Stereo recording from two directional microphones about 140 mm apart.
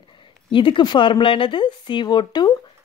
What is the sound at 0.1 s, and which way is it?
A woman's voice, 35° left (ahead or behind).